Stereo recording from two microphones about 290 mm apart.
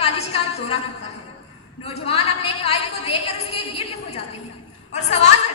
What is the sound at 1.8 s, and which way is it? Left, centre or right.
A woman's voice, left.